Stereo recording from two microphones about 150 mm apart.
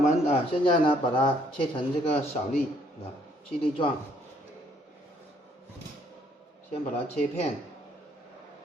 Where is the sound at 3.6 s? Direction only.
35° left (ahead or behind).